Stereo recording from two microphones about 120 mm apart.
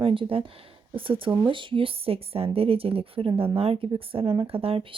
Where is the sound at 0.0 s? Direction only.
50° right (ahead or behind).